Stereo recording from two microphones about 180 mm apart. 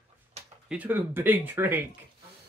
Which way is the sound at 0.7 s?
10° right (ahead or behind).